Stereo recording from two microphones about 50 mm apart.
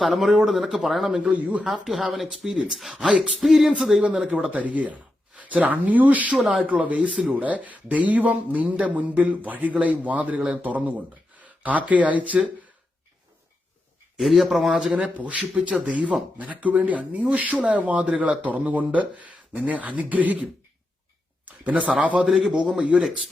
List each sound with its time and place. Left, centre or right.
0.0 s speech: centre
1.1 s speech: right
1.6 s speech: centre
4.3 s speech: right
14.2 s speech: centre
14.9 s speech: right
22.3 s speech: centre
22.7 s speech: right